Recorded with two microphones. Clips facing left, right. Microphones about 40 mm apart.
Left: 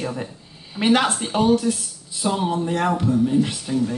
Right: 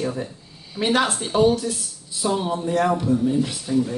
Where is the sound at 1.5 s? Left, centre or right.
Left.